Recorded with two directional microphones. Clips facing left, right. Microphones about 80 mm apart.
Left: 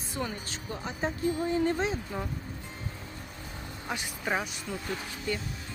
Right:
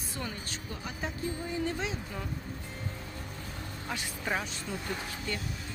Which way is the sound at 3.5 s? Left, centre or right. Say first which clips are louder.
Left 3 dB; centre.